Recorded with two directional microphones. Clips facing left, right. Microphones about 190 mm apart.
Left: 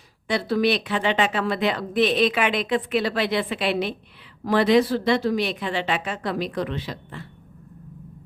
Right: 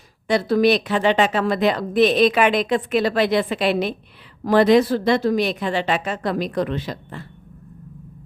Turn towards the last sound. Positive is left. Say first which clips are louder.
# right 4 dB
turn(degrees=-45)  # may be behind; listen again after turning